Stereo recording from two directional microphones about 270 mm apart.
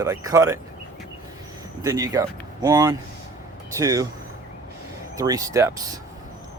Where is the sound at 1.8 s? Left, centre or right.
Centre.